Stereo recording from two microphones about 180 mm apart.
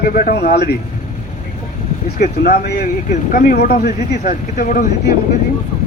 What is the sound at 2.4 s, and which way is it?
Speech, 60° left (ahead or behind).